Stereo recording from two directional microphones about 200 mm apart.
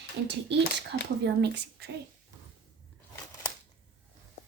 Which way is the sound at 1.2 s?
60° right (ahead or behind).